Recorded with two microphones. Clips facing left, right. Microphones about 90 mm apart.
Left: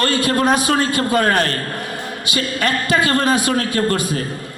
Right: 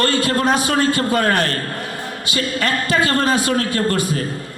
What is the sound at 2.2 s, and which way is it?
A man's voice, 20° left (ahead or behind).